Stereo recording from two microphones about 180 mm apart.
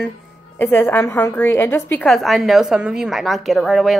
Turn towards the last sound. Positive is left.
turn(degrees=0)  # may be behind; listen again after turning